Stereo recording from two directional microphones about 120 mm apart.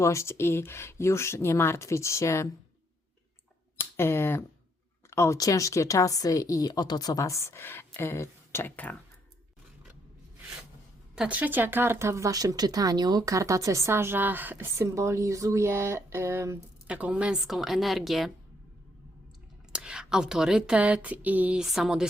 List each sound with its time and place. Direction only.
0.0 s speech: 25° left (ahead or behind)
3.8 s speech: 20° left (ahead or behind)
11.1 s speech: 10° right (ahead or behind)
16.8 s a woman's voice: 10° right (ahead or behind)
19.7 s speech: 5° right (ahead or behind)